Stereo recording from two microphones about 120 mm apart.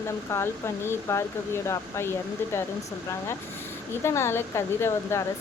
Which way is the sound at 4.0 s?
20° left (ahead or behind).